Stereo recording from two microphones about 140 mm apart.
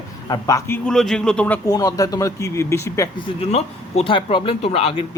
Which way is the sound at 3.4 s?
45° left (ahead or behind).